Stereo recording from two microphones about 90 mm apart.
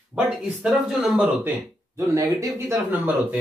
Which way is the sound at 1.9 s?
40° right (ahead or behind).